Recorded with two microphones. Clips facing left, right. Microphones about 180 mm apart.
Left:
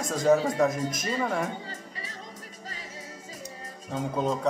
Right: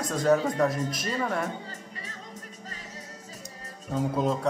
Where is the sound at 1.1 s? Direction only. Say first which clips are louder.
Left 1 dB; 5° left (ahead or behind).